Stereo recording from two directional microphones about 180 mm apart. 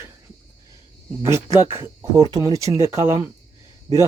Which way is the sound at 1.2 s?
15° right (ahead or behind).